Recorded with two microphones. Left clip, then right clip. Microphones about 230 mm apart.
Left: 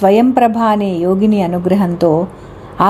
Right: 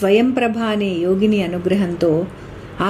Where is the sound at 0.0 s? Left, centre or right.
Centre.